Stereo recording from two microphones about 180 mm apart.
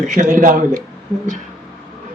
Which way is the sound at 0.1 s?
45° right (ahead or behind).